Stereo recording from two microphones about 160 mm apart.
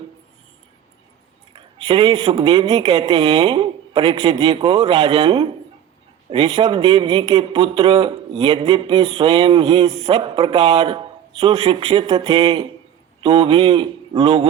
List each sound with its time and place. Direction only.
1.5 s a man's voice: 35° right (ahead or behind)